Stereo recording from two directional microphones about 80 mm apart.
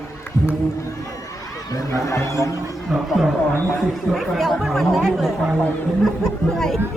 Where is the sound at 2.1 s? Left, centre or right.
Left.